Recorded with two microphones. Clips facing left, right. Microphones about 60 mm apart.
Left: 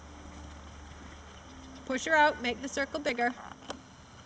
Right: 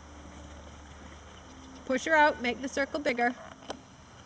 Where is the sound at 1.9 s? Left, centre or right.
Right.